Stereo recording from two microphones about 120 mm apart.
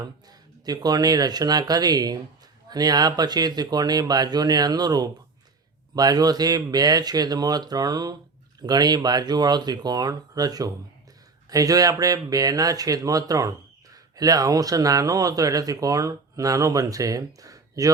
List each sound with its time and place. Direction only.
0.0 s speech: 35° right (ahead or behind)